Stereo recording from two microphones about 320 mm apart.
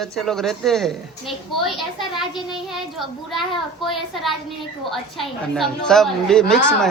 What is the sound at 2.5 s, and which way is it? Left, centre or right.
A woman's voice, centre.